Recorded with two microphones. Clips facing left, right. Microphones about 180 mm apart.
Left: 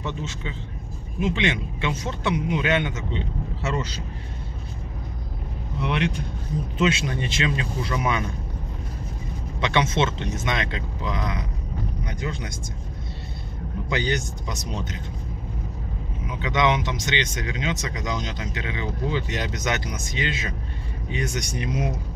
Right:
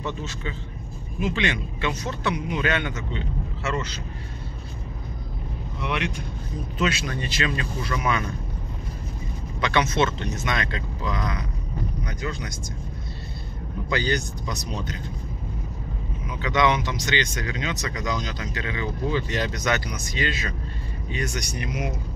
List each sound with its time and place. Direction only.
0.0 s speech: 20° left (ahead or behind)
6.8 s speech: 25° left (ahead or behind)
9.6 s speech: 25° left (ahead or behind)
13.8 s speech: 20° left (ahead or behind)
16.3 s speech: 20° left (ahead or behind)